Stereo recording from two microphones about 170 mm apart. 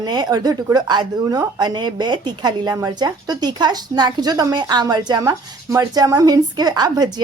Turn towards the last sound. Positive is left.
turn(degrees=-25)  # may be behind; listen again after turning